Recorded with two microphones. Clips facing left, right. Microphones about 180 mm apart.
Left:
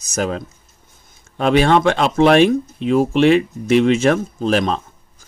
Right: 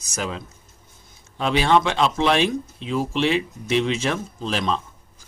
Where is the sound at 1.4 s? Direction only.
55° left (ahead or behind).